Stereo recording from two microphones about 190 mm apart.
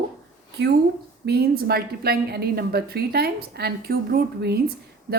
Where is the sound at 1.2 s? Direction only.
55° right (ahead or behind).